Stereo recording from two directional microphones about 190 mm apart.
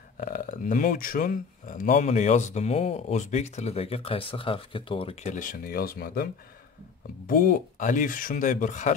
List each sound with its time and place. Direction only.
0.2 s speech: 50° left (ahead or behind)
7.2 s speech: 50° left (ahead or behind)